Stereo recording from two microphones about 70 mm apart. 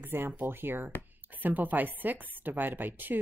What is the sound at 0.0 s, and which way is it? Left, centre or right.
A woman's voice, right.